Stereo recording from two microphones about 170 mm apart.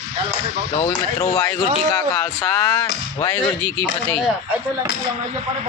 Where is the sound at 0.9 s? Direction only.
25° left (ahead or behind).